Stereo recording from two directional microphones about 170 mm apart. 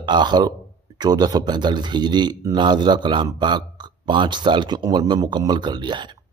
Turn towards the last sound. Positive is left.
turn(degrees=-25)  # may be behind; listen again after turning